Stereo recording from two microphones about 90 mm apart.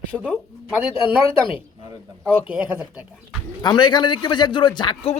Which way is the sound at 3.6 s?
55° left (ahead or behind).